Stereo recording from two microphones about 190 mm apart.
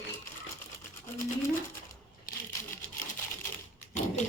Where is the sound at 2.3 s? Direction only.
45° left (ahead or behind).